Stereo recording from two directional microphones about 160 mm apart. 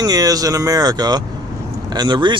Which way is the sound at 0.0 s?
25° right (ahead or behind).